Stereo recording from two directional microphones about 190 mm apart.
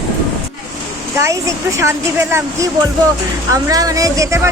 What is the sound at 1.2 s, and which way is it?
Speech, 15° right (ahead or behind).